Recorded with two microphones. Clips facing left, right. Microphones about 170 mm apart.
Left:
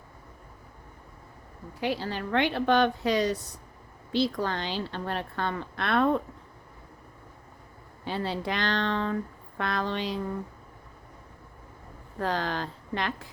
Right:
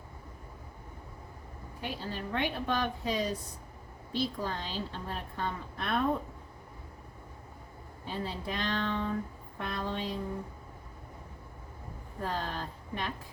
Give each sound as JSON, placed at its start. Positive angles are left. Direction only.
{"t": 1.8, "sound": "a woman's voice", "side_deg": 80}
{"t": 8.0, "sound": "a woman's voice", "side_deg": 80}
{"t": 12.2, "sound": "a woman's voice", "side_deg": 85}